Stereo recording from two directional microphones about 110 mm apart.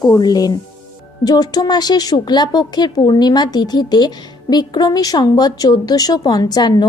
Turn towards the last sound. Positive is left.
turn(degrees=40)  # may be behind; listen again after turning